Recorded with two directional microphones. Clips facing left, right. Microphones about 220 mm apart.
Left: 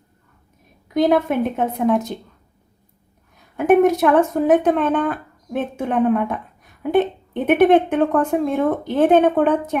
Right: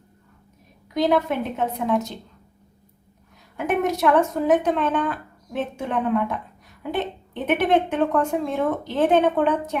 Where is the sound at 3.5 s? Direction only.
50° left (ahead or behind).